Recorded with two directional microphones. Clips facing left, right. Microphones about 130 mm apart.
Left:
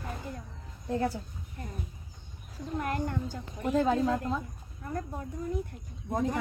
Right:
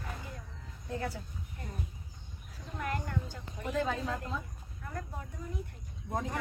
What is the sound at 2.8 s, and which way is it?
A woman's voice, 35° left (ahead or behind).